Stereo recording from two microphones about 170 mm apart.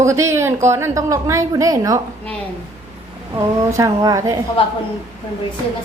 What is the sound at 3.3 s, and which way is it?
A woman's voice, 20° right (ahead or behind).